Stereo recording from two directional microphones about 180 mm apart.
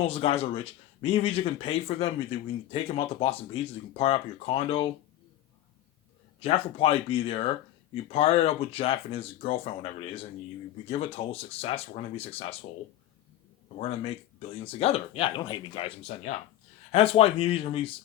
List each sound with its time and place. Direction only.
0.1 s speech: 30° left (ahead or behind)
6.4 s speech: 30° left (ahead or behind)
13.7 s speech: 30° left (ahead or behind)